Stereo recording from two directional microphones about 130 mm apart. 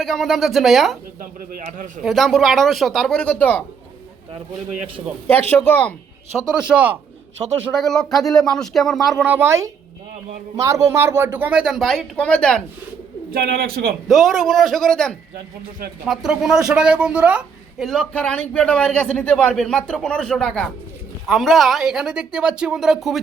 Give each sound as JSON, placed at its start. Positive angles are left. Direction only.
{"t": 0.0, "sound": "speech", "side_deg": 0}
{"t": 2.0, "sound": "speech", "side_deg": 0}
{"t": 5.3, "sound": "a man's voice", "side_deg": 15}
{"t": 6.5, "sound": "speech", "side_deg": -5}
{"t": 7.7, "sound": "speech", "side_deg": 0}
{"t": 9.2, "sound": "speech", "side_deg": -15}
{"t": 14.1, "sound": "speech", "side_deg": 0}
{"t": 17.8, "sound": "a man's voice", "side_deg": 5}